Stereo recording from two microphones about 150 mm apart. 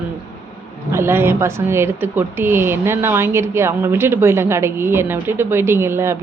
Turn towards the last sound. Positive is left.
turn(degrees=-15)  # may be behind; listen again after turning